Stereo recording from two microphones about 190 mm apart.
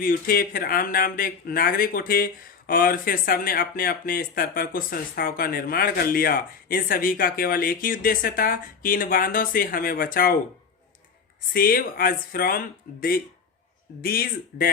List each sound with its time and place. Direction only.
0.0 s speech: 50° left (ahead or behind)
11.5 s speech: 50° left (ahead or behind)